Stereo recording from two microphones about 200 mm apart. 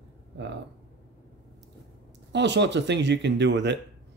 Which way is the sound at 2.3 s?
60° right (ahead or behind).